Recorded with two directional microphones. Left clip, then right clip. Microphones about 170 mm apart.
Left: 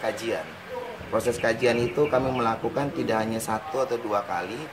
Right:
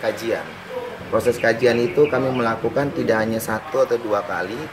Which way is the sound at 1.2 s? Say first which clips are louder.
Right 6 dB; 20° left (ahead or behind).